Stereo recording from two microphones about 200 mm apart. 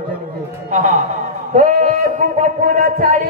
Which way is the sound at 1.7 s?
40° right (ahead or behind).